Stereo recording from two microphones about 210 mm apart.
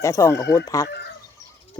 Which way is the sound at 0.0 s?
15° left (ahead or behind).